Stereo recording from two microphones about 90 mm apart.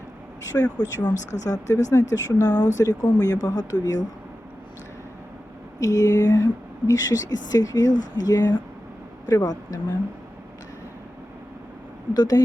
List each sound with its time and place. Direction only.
0.5 s speech: 45° left (ahead or behind)
5.8 s speech: 40° left (ahead or behind)
12.1 s speech: 50° left (ahead or behind)